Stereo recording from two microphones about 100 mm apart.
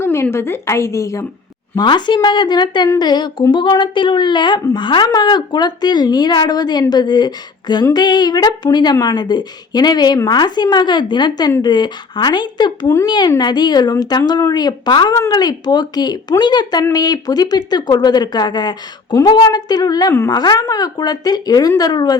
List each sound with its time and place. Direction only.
0.0 s a woman's voice: 25° left (ahead or behind)
1.7 s a woman's voice: 50° left (ahead or behind)